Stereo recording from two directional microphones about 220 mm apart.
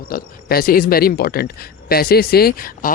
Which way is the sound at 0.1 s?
45° left (ahead or behind).